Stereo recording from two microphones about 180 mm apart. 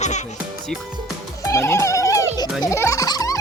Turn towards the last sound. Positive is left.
turn(degrees=20)  # may be behind; listen again after turning